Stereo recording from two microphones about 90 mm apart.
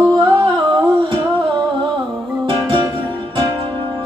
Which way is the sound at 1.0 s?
55° right (ahead or behind).